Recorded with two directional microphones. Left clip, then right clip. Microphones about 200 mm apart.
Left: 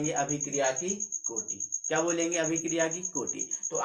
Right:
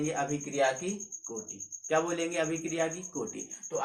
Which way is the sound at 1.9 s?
10° left (ahead or behind).